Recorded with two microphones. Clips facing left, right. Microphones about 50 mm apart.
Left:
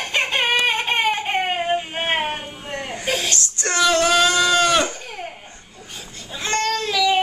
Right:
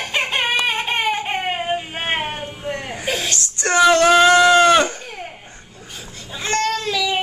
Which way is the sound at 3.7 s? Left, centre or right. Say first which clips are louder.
Right 5 dB; centre.